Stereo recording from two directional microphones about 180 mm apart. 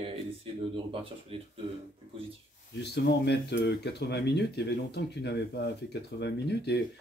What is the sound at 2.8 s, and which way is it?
Speech, 65° left (ahead or behind).